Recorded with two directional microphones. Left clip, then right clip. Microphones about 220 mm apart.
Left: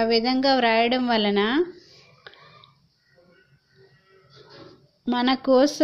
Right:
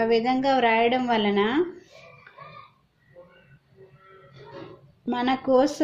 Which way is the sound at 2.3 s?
35° left (ahead or behind).